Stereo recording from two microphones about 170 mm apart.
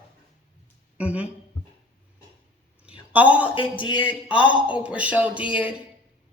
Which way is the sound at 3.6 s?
30° left (ahead or behind).